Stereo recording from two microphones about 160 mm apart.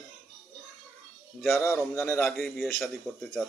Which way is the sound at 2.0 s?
15° left (ahead or behind).